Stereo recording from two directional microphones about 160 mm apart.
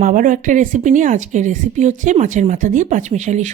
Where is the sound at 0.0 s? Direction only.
55° right (ahead or behind).